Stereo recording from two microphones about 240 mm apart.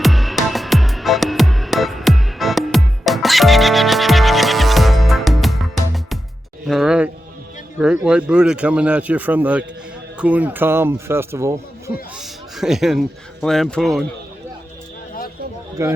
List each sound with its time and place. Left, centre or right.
0.0 s music: centre
6.7 s a sound: centre
7.8 s speech: centre
15.8 s speech: centre